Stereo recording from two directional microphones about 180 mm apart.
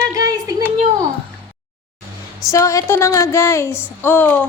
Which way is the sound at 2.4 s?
15° left (ahead or behind).